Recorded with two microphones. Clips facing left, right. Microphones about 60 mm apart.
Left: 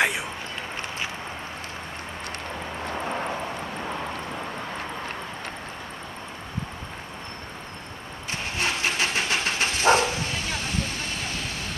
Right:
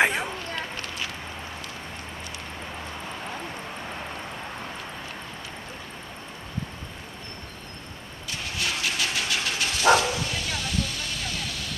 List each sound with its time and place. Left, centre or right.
2.9 s vehicle: left
8.3 s vehicle: left